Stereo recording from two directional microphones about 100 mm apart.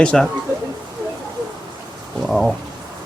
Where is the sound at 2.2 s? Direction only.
Centre (ahead or behind).